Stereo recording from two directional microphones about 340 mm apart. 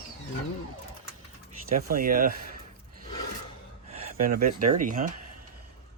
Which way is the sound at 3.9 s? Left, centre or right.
Centre.